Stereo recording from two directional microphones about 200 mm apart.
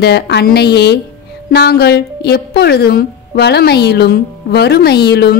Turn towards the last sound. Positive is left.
turn(degrees=55)  # may be behind; listen again after turning